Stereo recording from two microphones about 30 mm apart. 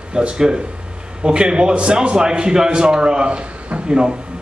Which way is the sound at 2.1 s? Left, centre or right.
Right.